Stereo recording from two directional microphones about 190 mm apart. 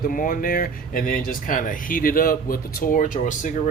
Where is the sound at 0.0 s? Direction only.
45° left (ahead or behind).